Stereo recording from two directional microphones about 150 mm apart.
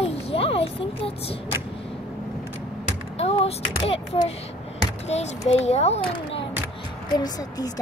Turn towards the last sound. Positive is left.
turn(degrees=25)  # may be behind; listen again after turning